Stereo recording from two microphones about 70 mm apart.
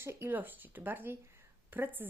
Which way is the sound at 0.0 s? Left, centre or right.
Right.